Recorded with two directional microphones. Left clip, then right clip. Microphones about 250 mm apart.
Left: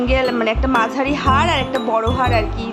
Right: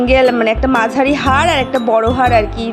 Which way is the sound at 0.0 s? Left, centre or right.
Centre.